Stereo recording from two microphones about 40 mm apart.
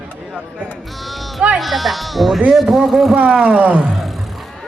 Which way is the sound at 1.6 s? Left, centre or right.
Centre.